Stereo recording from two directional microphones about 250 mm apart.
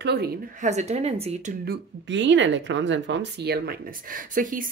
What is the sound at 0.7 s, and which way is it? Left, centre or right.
Speech, right.